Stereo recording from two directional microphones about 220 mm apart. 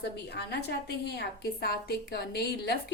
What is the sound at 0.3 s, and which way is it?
A woman's voice, 50° left (ahead or behind).